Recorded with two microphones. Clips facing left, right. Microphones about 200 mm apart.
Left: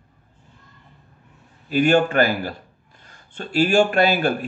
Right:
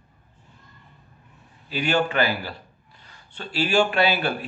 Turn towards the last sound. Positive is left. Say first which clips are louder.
# left 4 dB
turn(degrees=45)  # may be behind; listen again after turning